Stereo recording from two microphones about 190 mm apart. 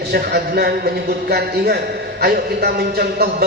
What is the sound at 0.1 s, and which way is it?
A man's voice, 55° right (ahead or behind).